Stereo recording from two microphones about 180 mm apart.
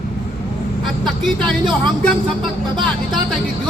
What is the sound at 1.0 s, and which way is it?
Speech, centre (ahead or behind).